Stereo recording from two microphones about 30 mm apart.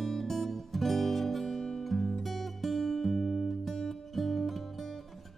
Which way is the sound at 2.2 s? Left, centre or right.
Centre.